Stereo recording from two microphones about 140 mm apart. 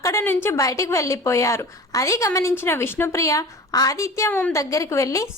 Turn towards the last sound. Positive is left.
turn(degrees=20)  # may be behind; listen again after turning